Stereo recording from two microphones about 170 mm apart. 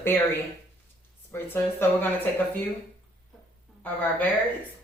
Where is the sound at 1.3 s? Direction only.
10° left (ahead or behind).